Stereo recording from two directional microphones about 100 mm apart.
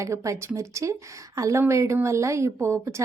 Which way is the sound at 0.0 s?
30° right (ahead or behind).